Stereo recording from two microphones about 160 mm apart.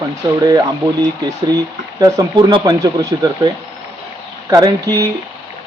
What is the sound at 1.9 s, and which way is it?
Speech, 20° right (ahead or behind).